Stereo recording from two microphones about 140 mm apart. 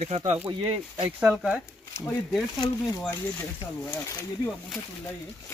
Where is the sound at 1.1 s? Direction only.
10° right (ahead or behind).